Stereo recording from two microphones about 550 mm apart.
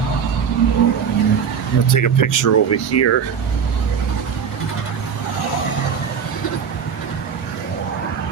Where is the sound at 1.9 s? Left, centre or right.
Left.